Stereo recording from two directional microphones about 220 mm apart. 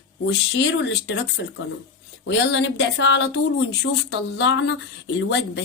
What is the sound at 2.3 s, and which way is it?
Speech, 55° left (ahead or behind).